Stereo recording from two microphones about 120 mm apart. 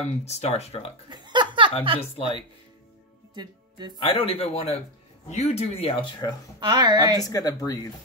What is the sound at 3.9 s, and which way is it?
Speech, 50° left (ahead or behind).